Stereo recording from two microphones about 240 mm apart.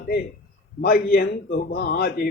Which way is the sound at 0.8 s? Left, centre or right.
Left.